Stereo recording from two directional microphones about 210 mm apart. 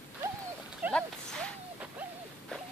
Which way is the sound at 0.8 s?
10° right (ahead or behind).